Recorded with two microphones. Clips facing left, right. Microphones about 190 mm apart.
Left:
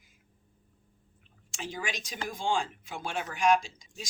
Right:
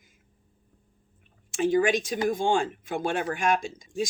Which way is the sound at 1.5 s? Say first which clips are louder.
Right 15 dB; 50° right (ahead or behind).